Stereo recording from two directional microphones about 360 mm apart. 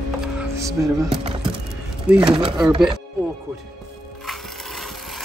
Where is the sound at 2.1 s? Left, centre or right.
Centre.